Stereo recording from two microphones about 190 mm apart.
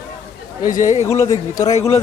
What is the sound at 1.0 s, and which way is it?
Speech, 15° left (ahead or behind).